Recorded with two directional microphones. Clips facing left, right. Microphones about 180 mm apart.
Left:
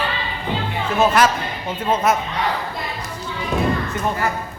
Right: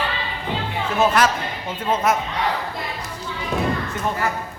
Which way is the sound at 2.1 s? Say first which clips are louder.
Left 1 dB; 25° left (ahead or behind).